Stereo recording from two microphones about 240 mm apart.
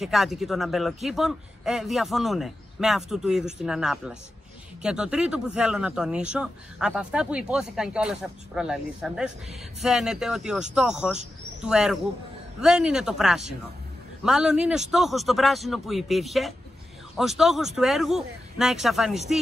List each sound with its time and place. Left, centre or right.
0.0 s speech: centre